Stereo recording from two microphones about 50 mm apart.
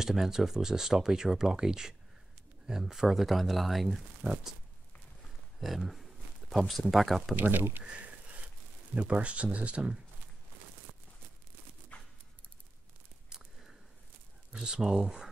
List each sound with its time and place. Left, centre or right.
0.0 s speech: centre
4.2 s speech: right
5.6 s a sound: centre
6.7 s speech: centre
7.8 s sniff: right
8.9 s speech: right
11.9 s dog: left
13.3 s a sound: centre
14.5 s speech: centre